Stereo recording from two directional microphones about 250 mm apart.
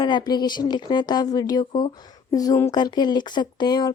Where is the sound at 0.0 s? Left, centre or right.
Centre.